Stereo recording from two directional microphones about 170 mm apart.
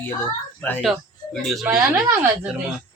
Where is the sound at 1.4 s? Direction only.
Centre (ahead or behind).